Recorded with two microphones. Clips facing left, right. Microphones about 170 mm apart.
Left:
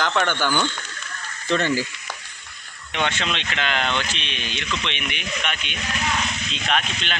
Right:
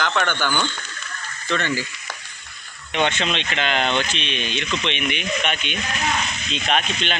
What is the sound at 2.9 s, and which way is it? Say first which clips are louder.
Speech: right 3 dB; 20° right (ahead or behind).